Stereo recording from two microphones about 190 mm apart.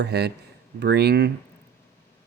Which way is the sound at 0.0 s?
60° right (ahead or behind).